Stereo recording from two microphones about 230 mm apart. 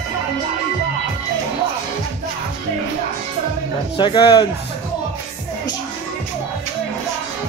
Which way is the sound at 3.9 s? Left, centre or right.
Left.